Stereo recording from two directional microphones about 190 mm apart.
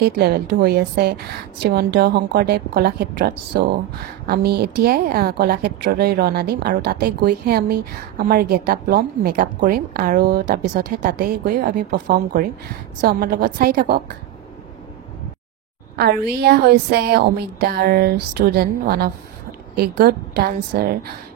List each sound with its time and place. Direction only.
0.0 s a woman's voice: 55° right (ahead or behind)
16.0 s a woman's voice: 55° right (ahead or behind)